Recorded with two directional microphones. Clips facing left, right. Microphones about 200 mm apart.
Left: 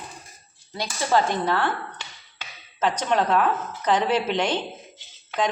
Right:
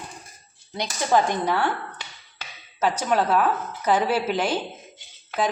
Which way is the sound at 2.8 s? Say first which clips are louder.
Even; 5° right (ahead or behind).